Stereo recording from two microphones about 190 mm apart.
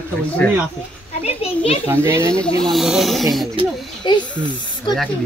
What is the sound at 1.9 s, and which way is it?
Speech, 15° right (ahead or behind).